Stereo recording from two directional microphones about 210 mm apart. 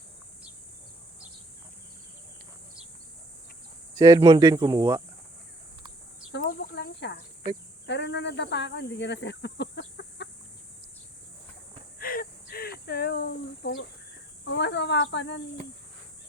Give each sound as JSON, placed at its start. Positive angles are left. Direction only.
{"t": 3.9, "sound": "speech", "side_deg": -15}
{"t": 6.3, "sound": "cricket", "side_deg": 55}
{"t": 7.9, "sound": "speech", "side_deg": 55}
{"t": 11.9, "sound": "a sound", "side_deg": 45}
{"t": 12.8, "sound": "speech", "side_deg": 50}